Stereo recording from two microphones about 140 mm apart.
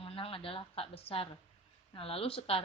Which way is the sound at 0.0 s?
40° left (ahead or behind).